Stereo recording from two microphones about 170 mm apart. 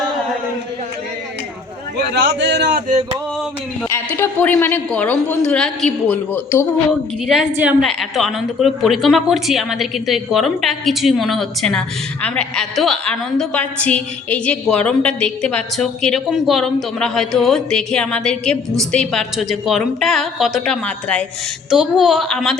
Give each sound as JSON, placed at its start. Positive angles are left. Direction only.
{"t": 2.0, "sound": "a man's voice", "side_deg": -90}
{"t": 3.8, "sound": "a woman's voice", "side_deg": 15}
{"t": 7.5, "sound": "a woman's voice", "side_deg": -10}